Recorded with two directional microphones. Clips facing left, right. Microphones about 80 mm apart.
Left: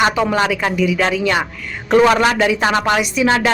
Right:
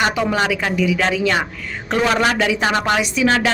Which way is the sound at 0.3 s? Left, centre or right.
Left.